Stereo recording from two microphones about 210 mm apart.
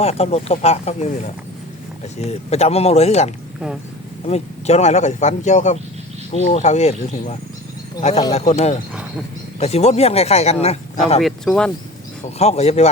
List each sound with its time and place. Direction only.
0.0 s a man's voice: 30° left (ahead or behind)
11.2 s speech: centre (ahead or behind)
12.2 s a man's voice: 30° left (ahead or behind)